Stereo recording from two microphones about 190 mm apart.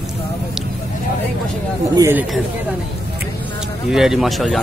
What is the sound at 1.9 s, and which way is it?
Speech, 15° right (ahead or behind).